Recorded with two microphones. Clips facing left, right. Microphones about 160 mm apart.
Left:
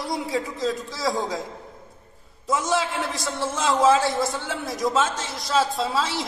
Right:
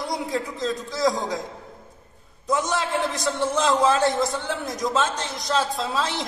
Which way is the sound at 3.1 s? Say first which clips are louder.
Right 3 dB; 20° right (ahead or behind).